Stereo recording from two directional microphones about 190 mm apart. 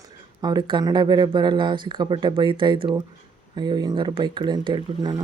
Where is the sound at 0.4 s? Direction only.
20° right (ahead or behind).